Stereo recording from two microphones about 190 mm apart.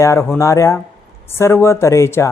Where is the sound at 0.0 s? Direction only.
15° left (ahead or behind).